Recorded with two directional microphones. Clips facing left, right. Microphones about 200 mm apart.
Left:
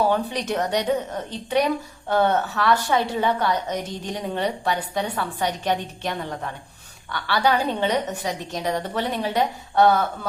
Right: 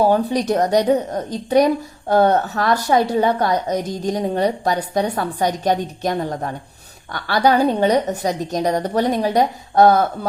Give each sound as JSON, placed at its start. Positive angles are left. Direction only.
{"t": 0.0, "sound": "speech", "side_deg": -40}